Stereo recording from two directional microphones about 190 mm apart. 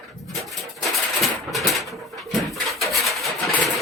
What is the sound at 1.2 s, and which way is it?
Pigeon, centre (ahead or behind).